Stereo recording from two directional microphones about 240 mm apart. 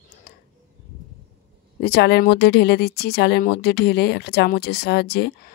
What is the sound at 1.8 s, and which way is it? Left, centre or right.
Speech, left.